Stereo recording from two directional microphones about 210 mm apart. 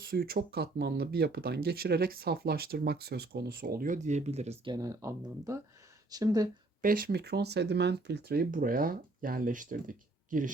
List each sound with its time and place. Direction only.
0.1 s speech: 45° right (ahead or behind); by 6.5 s 15° right (ahead or behind)
6.8 s speech: 45° right (ahead or behind)